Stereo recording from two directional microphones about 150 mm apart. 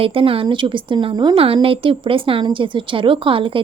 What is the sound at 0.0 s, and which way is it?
A woman's voice, 40° right (ahead or behind).